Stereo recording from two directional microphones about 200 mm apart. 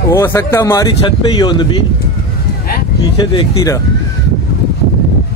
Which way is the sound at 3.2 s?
25° left (ahead or behind).